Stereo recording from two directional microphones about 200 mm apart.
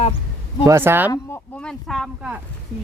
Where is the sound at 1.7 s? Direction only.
Centre (ahead or behind).